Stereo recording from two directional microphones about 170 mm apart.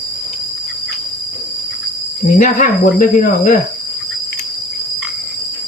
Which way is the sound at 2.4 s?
55° left (ahead or behind).